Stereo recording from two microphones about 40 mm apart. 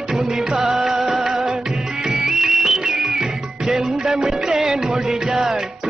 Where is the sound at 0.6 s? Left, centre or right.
Centre.